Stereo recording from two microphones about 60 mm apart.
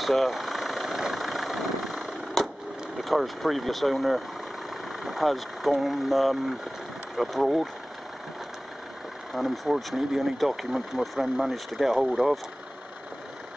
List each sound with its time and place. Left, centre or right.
0.0 s vehicle: centre
3.0 s speech: centre
9.3 s speech: centre